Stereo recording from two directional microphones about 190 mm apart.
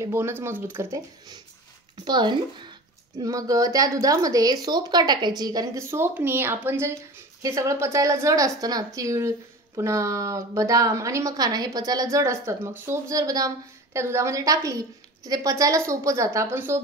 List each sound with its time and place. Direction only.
0.0 s a woman's voice: 15° right (ahead or behind)